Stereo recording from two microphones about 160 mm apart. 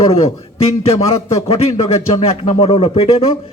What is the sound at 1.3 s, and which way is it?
A man's voice, 40° left (ahead or behind).